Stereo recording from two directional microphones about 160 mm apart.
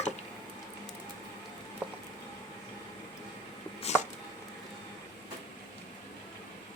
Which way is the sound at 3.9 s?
45° left (ahead or behind).